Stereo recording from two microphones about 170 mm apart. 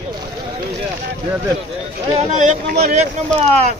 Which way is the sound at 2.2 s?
40° right (ahead or behind).